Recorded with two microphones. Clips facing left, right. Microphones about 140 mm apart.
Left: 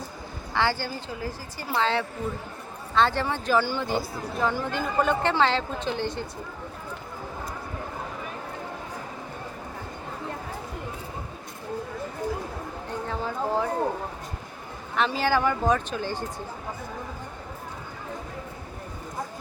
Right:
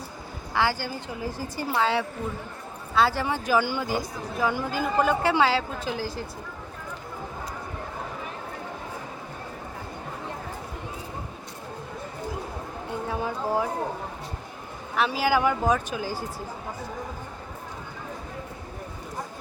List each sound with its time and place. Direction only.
0.5 s speech: 10° right (ahead or behind)
12.9 s a sound: 10° right (ahead or behind)
14.9 s speech: 5° right (ahead or behind)